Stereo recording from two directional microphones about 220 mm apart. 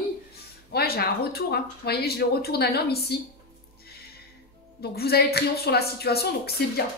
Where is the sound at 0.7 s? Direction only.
45° left (ahead or behind).